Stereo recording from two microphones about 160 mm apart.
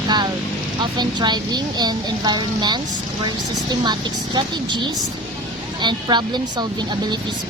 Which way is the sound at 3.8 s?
25° right (ahead or behind).